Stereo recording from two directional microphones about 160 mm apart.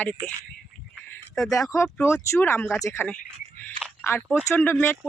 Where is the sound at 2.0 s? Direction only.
15° left (ahead or behind).